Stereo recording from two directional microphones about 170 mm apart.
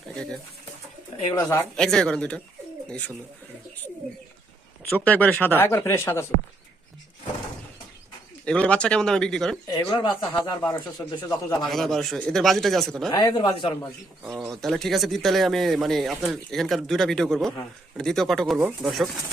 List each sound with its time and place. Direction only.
1.3 s speech: 20° left (ahead or behind)
1.7 s speech: 5° left (ahead or behind)
4.8 s speech: 10° left (ahead or behind)
8.4 s speech: 5° left (ahead or behind)
9.6 s speech: 25° left (ahead or behind)
11.7 s speech: centre (ahead or behind)
13.1 s speech: 25° left (ahead or behind)
14.5 s speech: centre (ahead or behind)